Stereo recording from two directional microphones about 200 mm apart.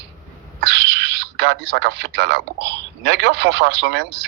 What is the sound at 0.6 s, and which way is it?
Speech, 60° right (ahead or behind).